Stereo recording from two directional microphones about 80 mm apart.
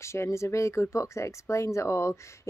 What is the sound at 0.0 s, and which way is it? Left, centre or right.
Speech, left.